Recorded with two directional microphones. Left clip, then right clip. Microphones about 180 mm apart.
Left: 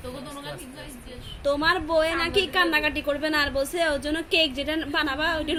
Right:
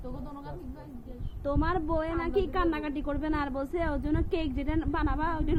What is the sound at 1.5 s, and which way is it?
A woman's voice, 35° right (ahead or behind).